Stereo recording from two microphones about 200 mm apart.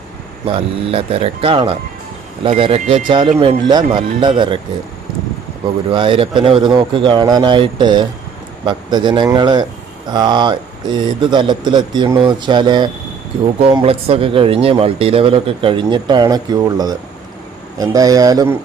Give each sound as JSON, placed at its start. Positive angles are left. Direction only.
{"t": 0.4, "sound": "speech", "side_deg": -30}
{"t": 5.9, "sound": "speech", "side_deg": -25}